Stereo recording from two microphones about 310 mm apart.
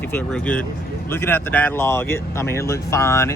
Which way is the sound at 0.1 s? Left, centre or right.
Centre.